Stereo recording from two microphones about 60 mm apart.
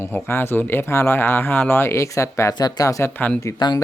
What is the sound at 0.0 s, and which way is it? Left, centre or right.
Speech, left.